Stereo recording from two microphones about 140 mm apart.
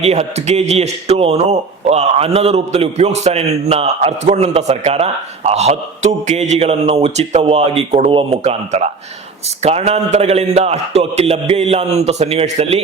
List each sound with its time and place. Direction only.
0.0 s a man's voice: 50° right (ahead or behind)